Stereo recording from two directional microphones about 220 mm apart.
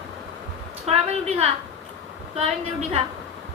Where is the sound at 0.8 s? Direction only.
30° right (ahead or behind).